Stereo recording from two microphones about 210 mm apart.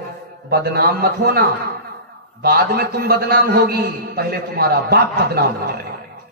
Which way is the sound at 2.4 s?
45° right (ahead or behind).